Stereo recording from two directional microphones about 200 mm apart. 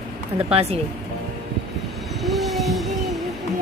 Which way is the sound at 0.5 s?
30° right (ahead or behind).